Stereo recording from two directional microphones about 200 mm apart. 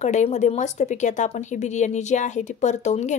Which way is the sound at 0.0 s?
35° left (ahead or behind).